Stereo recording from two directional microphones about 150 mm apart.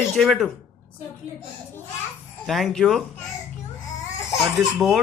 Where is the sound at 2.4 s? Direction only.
Centre (ahead or behind).